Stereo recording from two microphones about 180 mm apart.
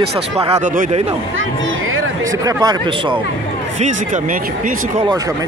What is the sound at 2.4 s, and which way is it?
Speech, 20° right (ahead or behind).